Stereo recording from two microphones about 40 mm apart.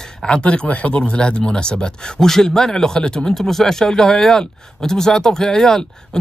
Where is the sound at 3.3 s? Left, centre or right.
Centre.